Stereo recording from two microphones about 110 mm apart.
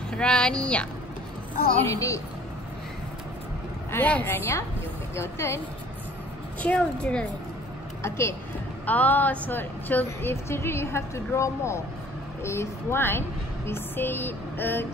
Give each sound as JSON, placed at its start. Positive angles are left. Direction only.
{"t": 0.1, "sound": "speech", "side_deg": 5}
{"t": 1.8, "sound": "a woman's voice", "side_deg": 25}
{"t": 3.9, "sound": "a woman's voice", "side_deg": 15}
{"t": 6.6, "sound": "speech", "side_deg": 10}
{"t": 8.0, "sound": "a woman's voice", "side_deg": 25}